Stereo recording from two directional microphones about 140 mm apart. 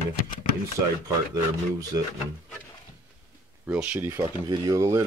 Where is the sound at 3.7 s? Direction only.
10° right (ahead or behind).